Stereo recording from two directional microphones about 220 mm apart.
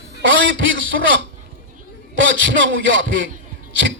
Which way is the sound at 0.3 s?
55° right (ahead or behind).